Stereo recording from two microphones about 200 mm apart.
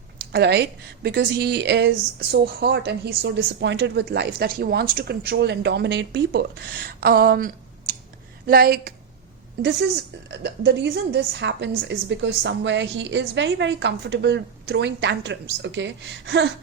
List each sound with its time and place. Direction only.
0.3 s a woman's voice: 55° right (ahead or behind)
10.2 s a woman's voice: 55° right (ahead or behind)